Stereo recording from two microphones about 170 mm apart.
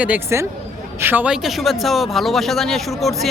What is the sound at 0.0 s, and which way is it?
Speech, 10° right (ahead or behind).